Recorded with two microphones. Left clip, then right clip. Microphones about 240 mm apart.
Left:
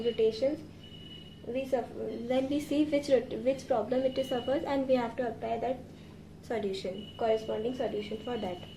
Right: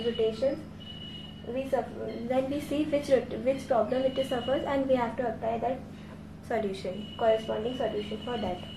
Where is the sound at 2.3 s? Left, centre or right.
Left.